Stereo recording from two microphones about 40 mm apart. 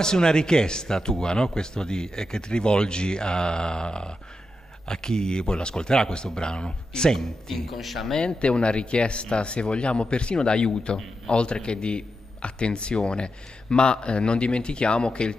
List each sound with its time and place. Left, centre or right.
0.0 s speech: centre
7.7 s speech: centre
8.1 s speech: left